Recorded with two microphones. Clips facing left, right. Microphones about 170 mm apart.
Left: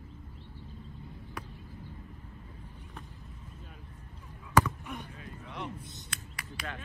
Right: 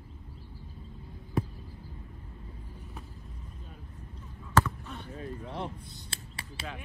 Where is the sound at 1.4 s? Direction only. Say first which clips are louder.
Right 13 dB; 25° right (ahead or behind).